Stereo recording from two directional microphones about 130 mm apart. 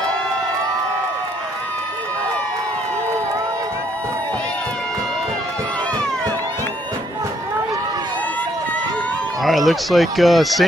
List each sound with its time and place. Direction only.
9.4 s speech: centre (ahead or behind)